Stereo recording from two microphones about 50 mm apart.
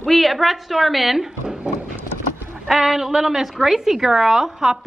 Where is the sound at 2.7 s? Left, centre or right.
Centre.